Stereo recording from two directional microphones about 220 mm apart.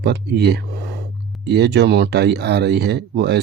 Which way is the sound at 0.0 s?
50° right (ahead or behind).